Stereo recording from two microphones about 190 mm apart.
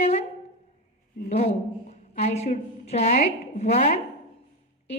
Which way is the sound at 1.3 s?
35° left (ahead or behind).